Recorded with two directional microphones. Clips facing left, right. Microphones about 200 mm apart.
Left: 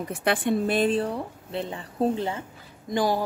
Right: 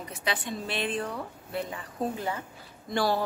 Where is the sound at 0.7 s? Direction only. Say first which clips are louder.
Left 8 dB; 35° left (ahead or behind).